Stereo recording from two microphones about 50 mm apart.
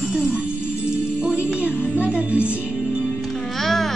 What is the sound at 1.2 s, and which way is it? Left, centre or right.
Music, right.